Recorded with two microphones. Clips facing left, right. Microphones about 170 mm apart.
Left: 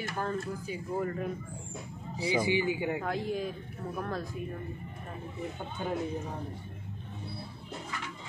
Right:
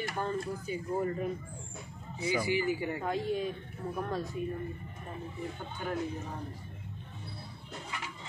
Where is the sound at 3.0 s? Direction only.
Centre (ahead or behind).